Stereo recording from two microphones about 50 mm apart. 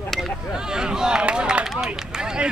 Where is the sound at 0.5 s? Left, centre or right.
Centre.